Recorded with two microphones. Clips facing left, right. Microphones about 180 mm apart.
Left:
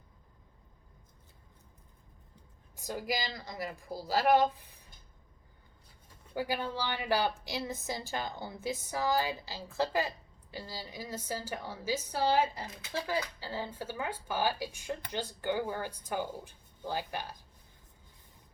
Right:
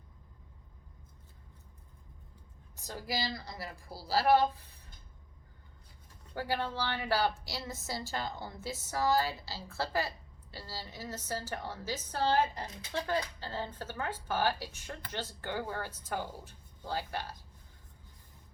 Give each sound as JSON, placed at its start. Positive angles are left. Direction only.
{"t": 2.7, "sound": "speech", "side_deg": 15}
{"t": 6.3, "sound": "speech", "side_deg": 10}